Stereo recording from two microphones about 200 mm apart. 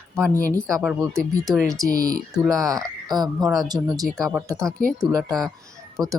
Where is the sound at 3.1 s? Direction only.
20° right (ahead or behind).